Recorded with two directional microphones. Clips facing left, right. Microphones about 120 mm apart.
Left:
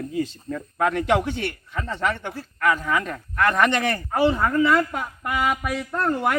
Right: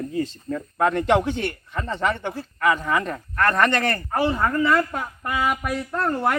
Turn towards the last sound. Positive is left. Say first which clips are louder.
# even
turn(degrees=0)  # may be behind; listen again after turning